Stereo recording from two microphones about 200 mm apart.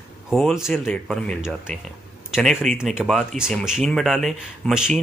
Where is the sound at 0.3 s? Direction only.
Centre (ahead or behind).